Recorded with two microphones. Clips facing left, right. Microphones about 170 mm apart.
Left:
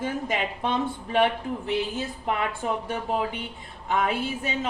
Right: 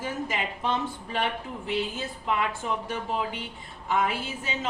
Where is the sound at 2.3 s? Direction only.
50° left (ahead or behind).